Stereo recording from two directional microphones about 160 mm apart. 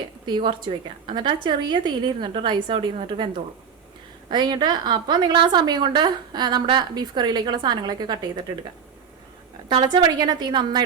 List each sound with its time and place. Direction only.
0.3 s a woman's voice: 30° right (ahead or behind)
9.6 s a woman's voice: 30° right (ahead or behind)